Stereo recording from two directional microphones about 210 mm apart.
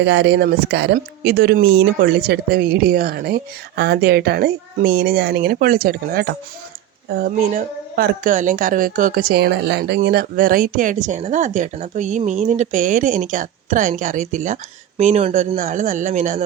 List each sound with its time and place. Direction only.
0.0 s a woman's voice: 55° right (ahead or behind); by 16.4 s 35° right (ahead or behind)